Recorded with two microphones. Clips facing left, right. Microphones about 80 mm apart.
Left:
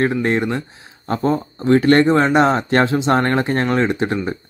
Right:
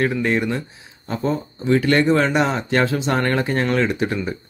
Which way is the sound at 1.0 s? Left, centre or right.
Left.